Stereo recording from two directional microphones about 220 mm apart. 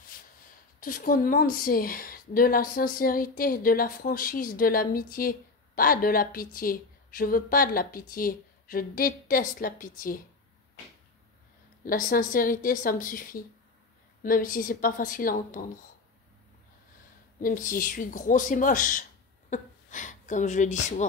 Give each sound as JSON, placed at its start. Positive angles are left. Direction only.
{"t": 0.7, "sound": "speech", "side_deg": 40}
{"t": 11.8, "sound": "speech", "side_deg": 40}
{"t": 17.4, "sound": "speech", "side_deg": 40}